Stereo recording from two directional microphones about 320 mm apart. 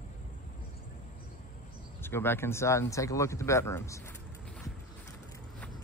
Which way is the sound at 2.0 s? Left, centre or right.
Centre.